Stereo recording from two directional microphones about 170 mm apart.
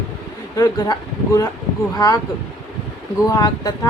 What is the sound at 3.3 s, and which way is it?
Speech, 25° left (ahead or behind).